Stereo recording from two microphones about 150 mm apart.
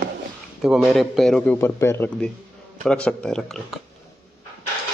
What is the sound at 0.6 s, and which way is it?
Speech, centre (ahead or behind).